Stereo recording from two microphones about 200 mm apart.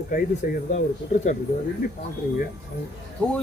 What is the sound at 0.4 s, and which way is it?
Speech, 50° left (ahead or behind).